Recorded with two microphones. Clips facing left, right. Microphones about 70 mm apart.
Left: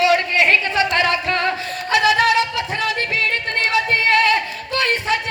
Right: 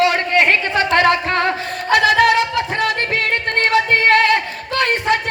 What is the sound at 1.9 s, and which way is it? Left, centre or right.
Music, right.